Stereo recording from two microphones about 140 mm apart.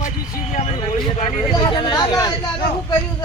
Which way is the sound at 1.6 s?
30° left (ahead or behind).